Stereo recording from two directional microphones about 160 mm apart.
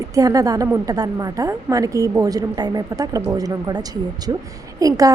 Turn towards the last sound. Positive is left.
turn(degrees=-20)  # may be behind; listen again after turning